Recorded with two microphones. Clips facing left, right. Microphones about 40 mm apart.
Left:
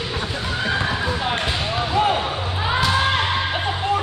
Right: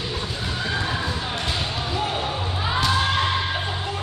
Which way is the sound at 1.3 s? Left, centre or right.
Left.